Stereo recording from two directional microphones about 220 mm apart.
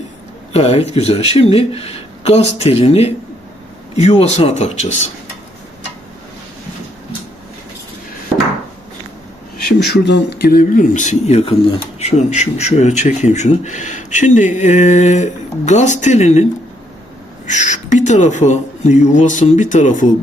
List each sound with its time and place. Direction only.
0.5 s speech: 30° left (ahead or behind)
9.9 s speech: 50° left (ahead or behind); by 20.1 s 35° left (ahead or behind)